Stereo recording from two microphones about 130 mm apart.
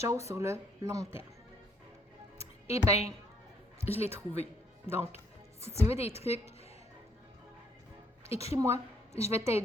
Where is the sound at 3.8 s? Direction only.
50° left (ahead or behind).